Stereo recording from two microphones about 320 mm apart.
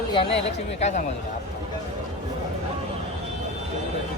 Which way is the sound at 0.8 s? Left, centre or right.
Left.